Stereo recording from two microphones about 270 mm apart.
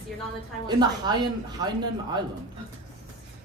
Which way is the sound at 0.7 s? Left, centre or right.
Centre.